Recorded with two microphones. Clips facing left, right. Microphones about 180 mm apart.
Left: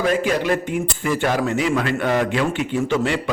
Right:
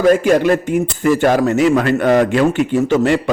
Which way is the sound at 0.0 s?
45° right (ahead or behind).